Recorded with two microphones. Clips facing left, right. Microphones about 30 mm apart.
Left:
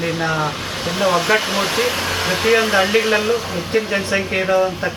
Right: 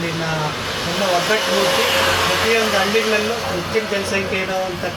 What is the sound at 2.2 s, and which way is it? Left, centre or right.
Speech, right.